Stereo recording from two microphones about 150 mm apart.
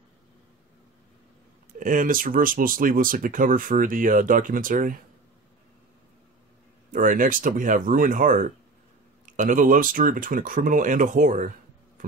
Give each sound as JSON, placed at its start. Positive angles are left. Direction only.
{"t": 1.8, "sound": "speech", "side_deg": -65}
{"t": 6.9, "sound": "speech", "side_deg": -60}
{"t": 12.0, "sound": "a sound", "side_deg": -65}